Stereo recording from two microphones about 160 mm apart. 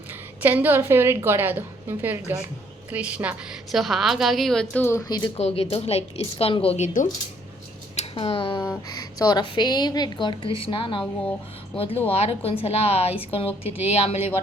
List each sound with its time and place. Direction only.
0.1 s a woman's voice: 10° right (ahead or behind); by 5.3 s 25° left (ahead or behind)
5.4 s speech: 40° left (ahead or behind)
8.1 s speech: 35° left (ahead or behind)
8.5 s a woman's voice: 20° left (ahead or behind)
12.1 s speech: 40° left (ahead or behind)